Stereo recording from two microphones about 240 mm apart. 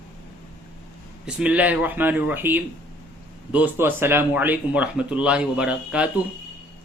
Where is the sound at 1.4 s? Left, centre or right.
Centre.